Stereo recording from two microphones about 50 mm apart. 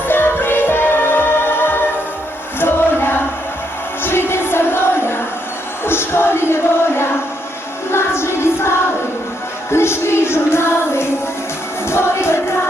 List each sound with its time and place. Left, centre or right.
0.1 s music: left